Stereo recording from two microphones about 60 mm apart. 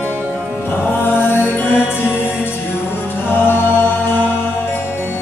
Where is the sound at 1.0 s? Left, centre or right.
Left.